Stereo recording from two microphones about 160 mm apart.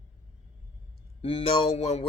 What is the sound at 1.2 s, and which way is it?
Speech, 35° left (ahead or behind).